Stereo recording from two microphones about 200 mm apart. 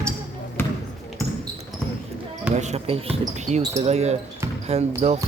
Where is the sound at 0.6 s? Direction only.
10° left (ahead or behind).